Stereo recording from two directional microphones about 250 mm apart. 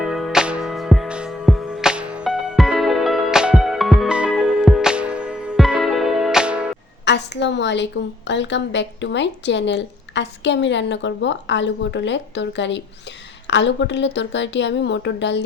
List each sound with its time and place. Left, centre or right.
0.0 s music: centre
7.0 s a woman's voice: left